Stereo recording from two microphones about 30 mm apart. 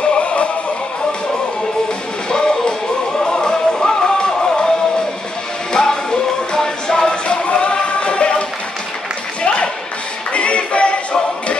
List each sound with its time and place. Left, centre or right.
0.0 s music: left
2.2 s music: left
7.4 s choir: left
9.4 s music: left